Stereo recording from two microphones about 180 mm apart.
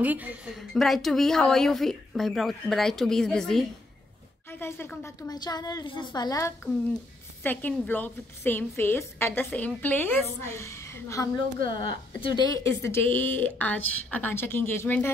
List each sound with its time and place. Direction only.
0.0 s a woman's voice: 10° right (ahead or behind); by 6.7 s 15° left (ahead or behind)
7.4 s a woman's voice: 5° left (ahead or behind)
11.8 s speech: 25° left (ahead or behind)